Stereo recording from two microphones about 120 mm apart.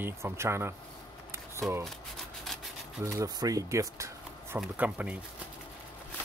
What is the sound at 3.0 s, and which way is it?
Speech, 30° right (ahead or behind).